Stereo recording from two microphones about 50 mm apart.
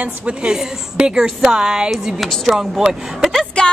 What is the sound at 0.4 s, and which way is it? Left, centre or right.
A woman's voice, centre.